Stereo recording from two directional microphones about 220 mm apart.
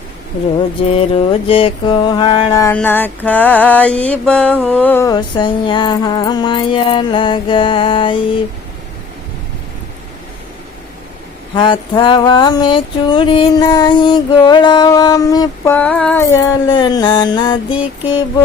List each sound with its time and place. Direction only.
0.9 s mantra: 25° left (ahead or behind)
11.5 s mantra: 20° left (ahead or behind)
16.6 s mantra: 20° left (ahead or behind)